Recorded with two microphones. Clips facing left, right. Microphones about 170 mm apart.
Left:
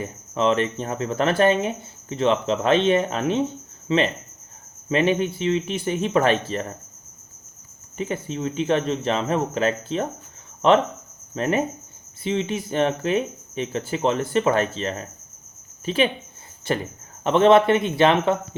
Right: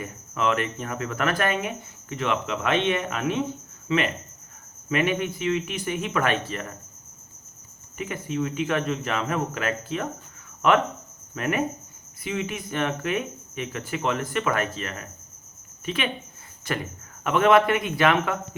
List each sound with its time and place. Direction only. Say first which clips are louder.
0.0 s speech: left 4 dB; 30° left (ahead or behind)
7.9 s speech: left 1 dB; 30° left (ahead or behind)